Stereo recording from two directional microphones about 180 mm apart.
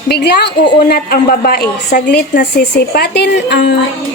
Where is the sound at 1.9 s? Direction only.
70° left (ahead or behind).